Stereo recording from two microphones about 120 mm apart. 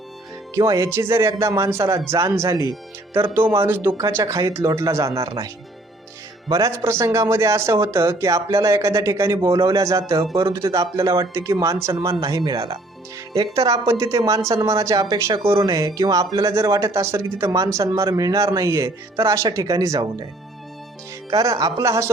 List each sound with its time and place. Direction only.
0.5 s speech: 30° right (ahead or behind)
6.5 s speech: 25° right (ahead or behind)
21.2 s speech: 30° right (ahead or behind)